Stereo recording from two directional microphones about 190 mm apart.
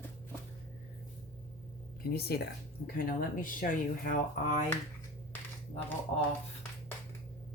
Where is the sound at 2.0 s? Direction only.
55° left (ahead or behind).